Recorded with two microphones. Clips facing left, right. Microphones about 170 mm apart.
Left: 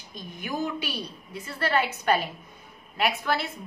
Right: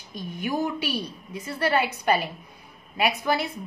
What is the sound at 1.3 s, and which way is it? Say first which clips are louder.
A woman's voice: right 3 dB; 15° right (ahead or behind).